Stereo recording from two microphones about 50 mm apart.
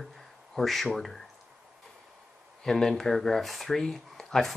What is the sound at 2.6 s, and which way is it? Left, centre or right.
Speech, centre.